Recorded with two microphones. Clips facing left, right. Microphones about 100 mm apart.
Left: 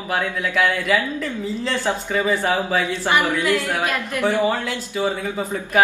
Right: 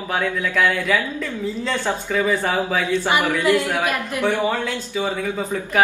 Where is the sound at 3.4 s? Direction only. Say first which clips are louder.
Right 2 dB; 20° right (ahead or behind).